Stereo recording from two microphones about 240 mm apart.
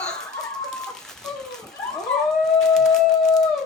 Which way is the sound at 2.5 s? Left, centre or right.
Centre.